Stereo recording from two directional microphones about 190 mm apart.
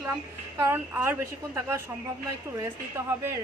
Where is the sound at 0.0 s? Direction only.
15° right (ahead or behind).